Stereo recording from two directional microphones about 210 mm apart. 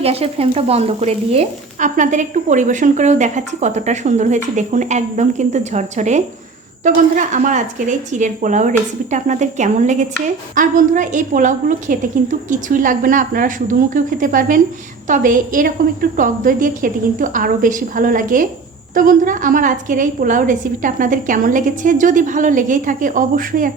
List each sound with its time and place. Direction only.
0.0 s a woman's voice: 30° right (ahead or behind)